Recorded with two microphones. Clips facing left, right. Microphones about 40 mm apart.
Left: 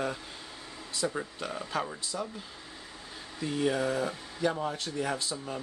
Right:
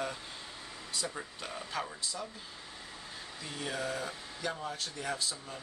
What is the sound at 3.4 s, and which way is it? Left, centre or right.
Speech, centre.